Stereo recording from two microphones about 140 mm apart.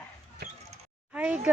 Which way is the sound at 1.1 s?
10° right (ahead or behind).